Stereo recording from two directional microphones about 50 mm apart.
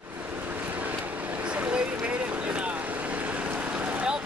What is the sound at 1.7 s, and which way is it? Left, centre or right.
Boat, right.